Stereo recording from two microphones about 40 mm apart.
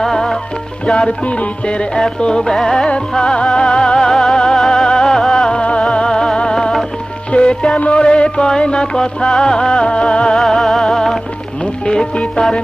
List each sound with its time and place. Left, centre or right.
0.0 s music: centre
0.8 s music: left
10.5 s music: centre
11.6 s music: left